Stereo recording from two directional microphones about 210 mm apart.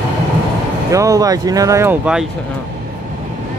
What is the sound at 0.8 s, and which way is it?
Speech, 15° right (ahead or behind).